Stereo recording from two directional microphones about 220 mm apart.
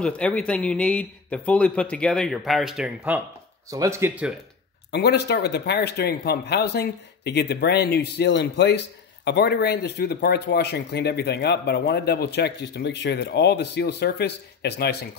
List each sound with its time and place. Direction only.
0.0 s a man's voice: 5° left (ahead or behind)
4.9 s speech: 50° left (ahead or behind)